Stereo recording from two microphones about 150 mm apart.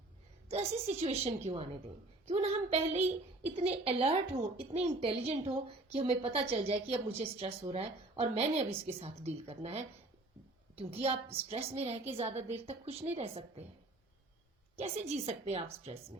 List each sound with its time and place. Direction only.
0.4 s a woman's voice: 45° right (ahead or behind)
14.8 s a woman's voice: 45° right (ahead or behind)